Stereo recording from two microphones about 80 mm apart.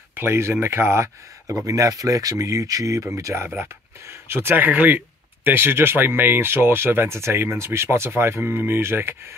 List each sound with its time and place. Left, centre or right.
0.1 s speech: right
3.4 s speech: right